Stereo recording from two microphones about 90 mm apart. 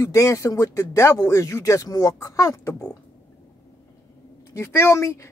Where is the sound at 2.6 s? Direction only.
25° left (ahead or behind).